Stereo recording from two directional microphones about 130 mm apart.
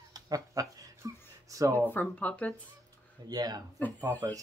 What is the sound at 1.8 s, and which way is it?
Speech, 10° left (ahead or behind).